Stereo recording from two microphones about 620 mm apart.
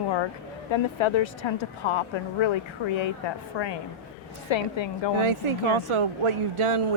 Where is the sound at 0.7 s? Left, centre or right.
Left.